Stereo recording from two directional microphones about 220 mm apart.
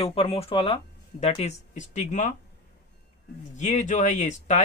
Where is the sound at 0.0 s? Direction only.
25° left (ahead or behind).